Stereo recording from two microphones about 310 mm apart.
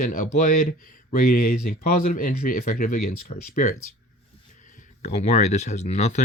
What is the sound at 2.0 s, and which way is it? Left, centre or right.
Speech, left.